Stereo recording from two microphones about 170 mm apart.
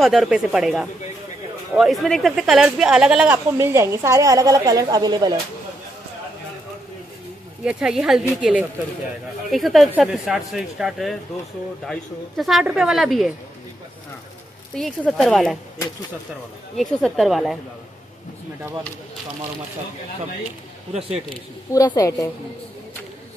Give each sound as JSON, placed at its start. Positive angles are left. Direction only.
{"t": 0.0, "sound": "speech", "side_deg": 0}
{"t": 3.5, "sound": "a woman's voice", "side_deg": -15}
{"t": 7.6, "sound": "speech", "side_deg": -5}
{"t": 14.8, "sound": "speech", "side_deg": 0}
{"t": 16.7, "sound": "speech", "side_deg": 0}
{"t": 21.7, "sound": "a woman's voice", "side_deg": 20}